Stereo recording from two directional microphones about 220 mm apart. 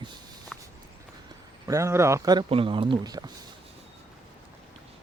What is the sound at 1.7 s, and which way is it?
Speech, 10° right (ahead or behind).